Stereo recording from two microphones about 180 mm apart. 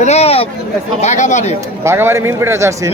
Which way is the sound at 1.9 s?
15° right (ahead or behind).